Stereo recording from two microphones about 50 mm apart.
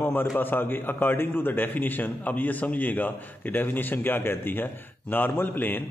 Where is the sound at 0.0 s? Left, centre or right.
Left.